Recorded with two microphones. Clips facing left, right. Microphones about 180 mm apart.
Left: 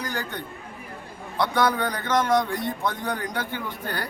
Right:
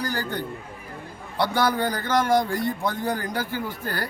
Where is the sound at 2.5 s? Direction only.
Centre (ahead or behind).